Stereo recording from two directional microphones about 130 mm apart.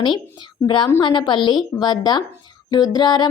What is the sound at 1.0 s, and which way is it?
Speech, 40° left (ahead or behind).